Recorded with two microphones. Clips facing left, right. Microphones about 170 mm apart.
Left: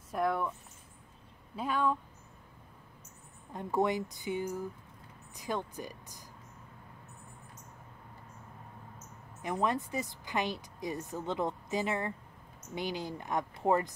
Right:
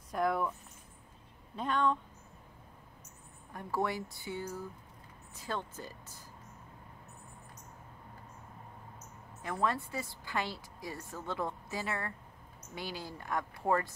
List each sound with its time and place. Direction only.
0.1 s speech: centre (ahead or behind)
1.6 s speech: 5° left (ahead or behind)
3.5 s a woman's voice: 20° left (ahead or behind)
9.4 s a woman's voice: 20° left (ahead or behind)